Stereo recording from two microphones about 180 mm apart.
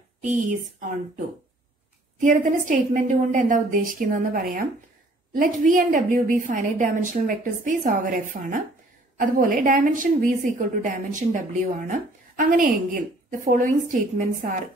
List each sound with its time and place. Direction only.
0.2 s a woman's voice: 45° right (ahead or behind)
2.1 s a woman's voice: 45° right (ahead or behind)